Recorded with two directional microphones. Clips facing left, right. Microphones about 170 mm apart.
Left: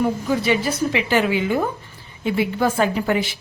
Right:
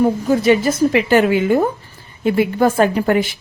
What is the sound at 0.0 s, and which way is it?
A woman's voice, 45° right (ahead or behind).